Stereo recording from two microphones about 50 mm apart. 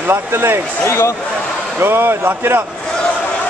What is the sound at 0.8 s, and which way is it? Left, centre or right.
Speech, left.